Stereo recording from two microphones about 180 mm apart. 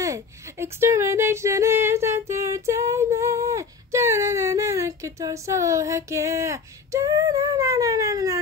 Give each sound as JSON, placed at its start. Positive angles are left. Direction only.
{"t": 0.0, "sound": "speech", "side_deg": -15}